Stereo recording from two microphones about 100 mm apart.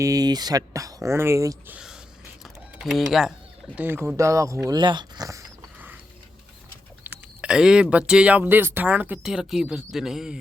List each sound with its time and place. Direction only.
0.0 s speech: 35° right (ahead or behind)
2.4 s typing: centre (ahead or behind)
3.8 s speech: 20° right (ahead or behind)
4.6 s speech: 45° right (ahead or behind)
7.0 s speech: 15° right (ahead or behind)
9.2 s speech: 5° right (ahead or behind)